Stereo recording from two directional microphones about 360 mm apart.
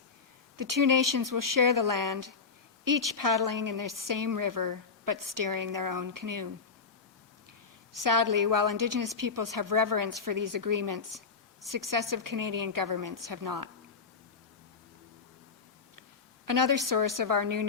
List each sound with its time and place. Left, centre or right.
0.5 s a woman's voice: right
7.9 s a woman's voice: right
16.5 s a woman's voice: right